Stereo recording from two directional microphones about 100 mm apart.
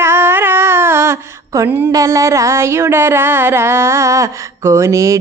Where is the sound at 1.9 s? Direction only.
30° right (ahead or behind).